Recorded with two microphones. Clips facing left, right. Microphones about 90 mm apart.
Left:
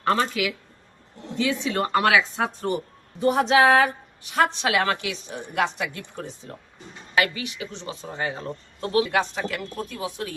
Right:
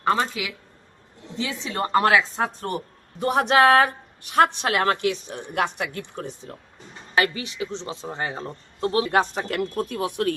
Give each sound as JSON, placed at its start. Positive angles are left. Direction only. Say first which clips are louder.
{"t": 0.0, "sound": "speech", "louder": "even", "side_deg": -15}
{"t": 1.4, "sound": "a man's voice", "louder": "left 3 dB", "side_deg": -30}
{"t": 2.6, "sound": "a woman's voice", "louder": "left 3 dB", "side_deg": -55}
{"t": 7.2, "sound": "a man's voice", "louder": "right 1 dB", "side_deg": -30}
{"t": 9.3, "sound": "speech", "louder": "right 4 dB", "side_deg": -50}